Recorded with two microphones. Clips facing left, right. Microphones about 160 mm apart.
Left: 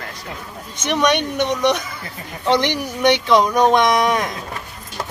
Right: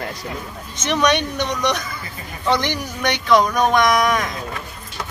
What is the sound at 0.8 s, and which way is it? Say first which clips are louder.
Speech: left 1 dB; 15° left (ahead or behind).